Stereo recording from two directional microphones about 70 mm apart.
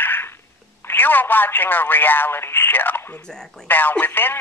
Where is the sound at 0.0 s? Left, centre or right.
Left.